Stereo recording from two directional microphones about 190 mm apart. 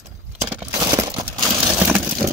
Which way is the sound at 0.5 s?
15° right (ahead or behind).